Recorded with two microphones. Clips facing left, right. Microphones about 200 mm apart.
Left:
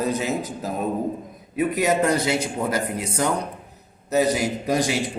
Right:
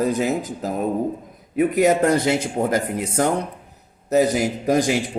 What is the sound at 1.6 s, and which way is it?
Speech, 50° right (ahead or behind).